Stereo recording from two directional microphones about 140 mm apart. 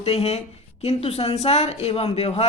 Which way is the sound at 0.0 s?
45° left (ahead or behind).